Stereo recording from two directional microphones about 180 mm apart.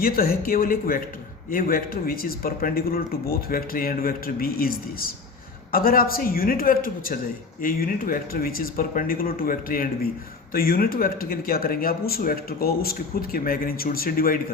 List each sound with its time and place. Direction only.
0.0 s speech: 55° left (ahead or behind)